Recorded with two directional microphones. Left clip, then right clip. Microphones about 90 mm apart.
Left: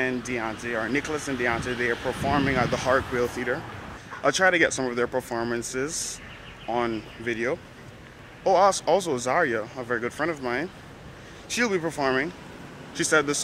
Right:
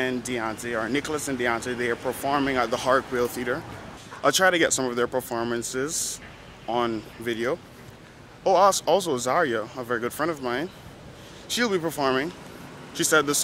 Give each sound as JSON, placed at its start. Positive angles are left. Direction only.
{"t": 0.0, "sound": "speech", "side_deg": -15}